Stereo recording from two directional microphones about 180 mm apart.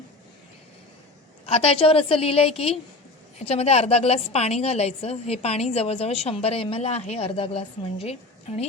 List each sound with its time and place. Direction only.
1.5 s a woman's voice: 35° left (ahead or behind)